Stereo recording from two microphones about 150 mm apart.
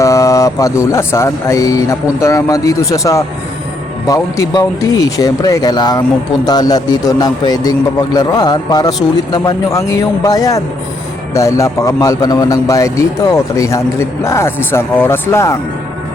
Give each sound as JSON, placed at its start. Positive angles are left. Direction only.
{"t": 0.0, "sound": "a man's voice", "side_deg": 20}